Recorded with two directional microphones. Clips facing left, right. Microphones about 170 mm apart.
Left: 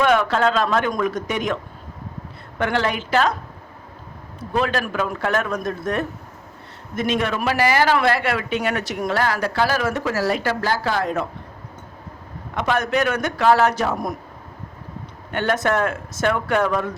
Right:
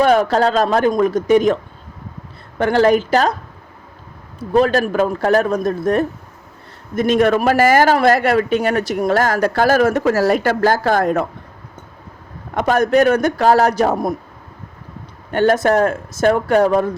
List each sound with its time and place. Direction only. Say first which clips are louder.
0.0 s a man's voice: right 4 dB; 40° right (ahead or behind)
0.9 s a man's voice: right 9 dB; 30° right (ahead or behind)
2.6 s a man's voice: right 9 dB; 40° right (ahead or behind)
4.5 s a man's voice: right 7 dB; 40° right (ahead or behind)
12.5 s a man's voice: right 7 dB; 40° right (ahead or behind)
15.3 s a man's voice: right 7 dB; 40° right (ahead or behind)